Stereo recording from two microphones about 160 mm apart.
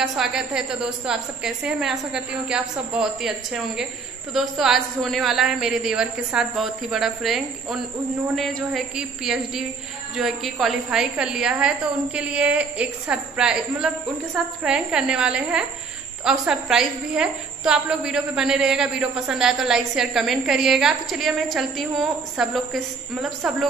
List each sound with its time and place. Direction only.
0.0 s a woman's voice: centre (ahead or behind)